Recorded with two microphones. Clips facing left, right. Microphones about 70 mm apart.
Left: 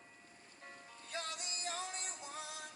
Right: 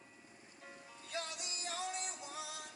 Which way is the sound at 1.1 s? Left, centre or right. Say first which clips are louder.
Even; left.